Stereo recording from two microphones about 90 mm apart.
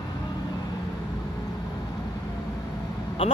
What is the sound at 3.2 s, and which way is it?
Speech, 80° left.